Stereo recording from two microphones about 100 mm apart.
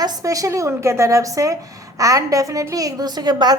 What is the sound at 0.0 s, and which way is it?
A woman's voice, 35° right (ahead or behind).